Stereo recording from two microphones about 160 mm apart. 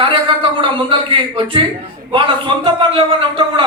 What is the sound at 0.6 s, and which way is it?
A man's voice, 30° right (ahead or behind).